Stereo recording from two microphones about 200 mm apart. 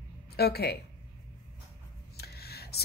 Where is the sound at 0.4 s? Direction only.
55° left (ahead or behind).